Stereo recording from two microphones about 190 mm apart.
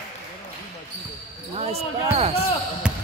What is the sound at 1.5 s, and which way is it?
Speech, 35° right (ahead or behind).